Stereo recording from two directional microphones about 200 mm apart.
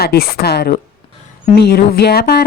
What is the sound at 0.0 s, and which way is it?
Speech, 50° left (ahead or behind).